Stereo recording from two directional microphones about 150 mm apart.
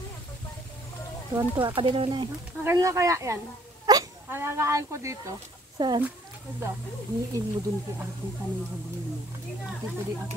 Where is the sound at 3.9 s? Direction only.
25° right (ahead or behind).